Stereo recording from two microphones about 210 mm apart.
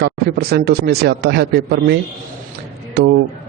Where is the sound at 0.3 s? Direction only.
50° right (ahead or behind).